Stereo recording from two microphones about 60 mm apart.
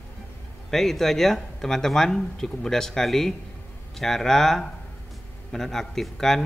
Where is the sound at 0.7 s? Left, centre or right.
Centre.